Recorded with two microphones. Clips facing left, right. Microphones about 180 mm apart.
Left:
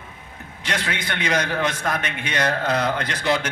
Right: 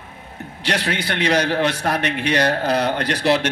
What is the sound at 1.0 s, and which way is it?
Speech, 35° right (ahead or behind).